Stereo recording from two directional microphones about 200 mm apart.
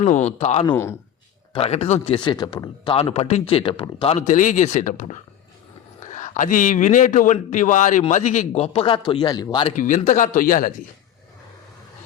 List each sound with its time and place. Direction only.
0.0 s a man's voice: 35° left (ahead or behind)
0.7 s speech: 10° left (ahead or behind)
1.5 s a man's voice: 30° left (ahead or behind)
9.7 s a man's voice: 40° left (ahead or behind)